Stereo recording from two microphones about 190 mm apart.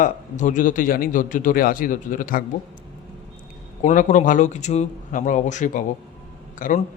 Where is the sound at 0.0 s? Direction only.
45° left (ahead or behind).